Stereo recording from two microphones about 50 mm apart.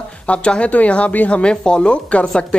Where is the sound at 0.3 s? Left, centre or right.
Left.